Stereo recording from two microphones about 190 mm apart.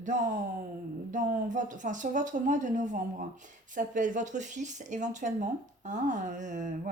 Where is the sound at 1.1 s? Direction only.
40° right (ahead or behind).